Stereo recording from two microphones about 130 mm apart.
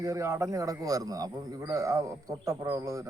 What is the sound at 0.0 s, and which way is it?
A man's voice, 25° right (ahead or behind).